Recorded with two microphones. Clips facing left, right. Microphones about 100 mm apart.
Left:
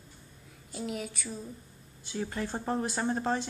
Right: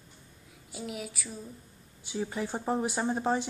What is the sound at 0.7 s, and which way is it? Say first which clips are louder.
Speech: left 2 dB; 5° right (ahead or behind).